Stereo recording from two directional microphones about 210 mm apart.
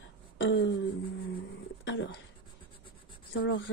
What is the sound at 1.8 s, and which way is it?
Speech, 55° left (ahead or behind).